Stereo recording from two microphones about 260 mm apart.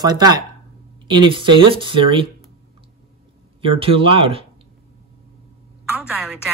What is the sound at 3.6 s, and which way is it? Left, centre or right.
Speech, right.